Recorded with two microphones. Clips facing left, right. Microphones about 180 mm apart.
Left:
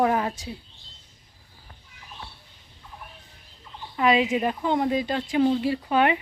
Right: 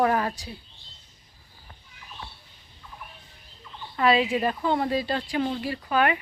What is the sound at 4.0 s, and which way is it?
Speech, 15° left (ahead or behind).